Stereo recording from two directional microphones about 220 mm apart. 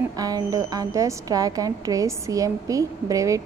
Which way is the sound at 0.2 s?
15° right (ahead or behind).